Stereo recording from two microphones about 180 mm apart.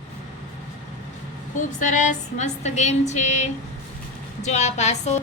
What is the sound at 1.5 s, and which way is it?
A woman's voice, 40° left (ahead or behind).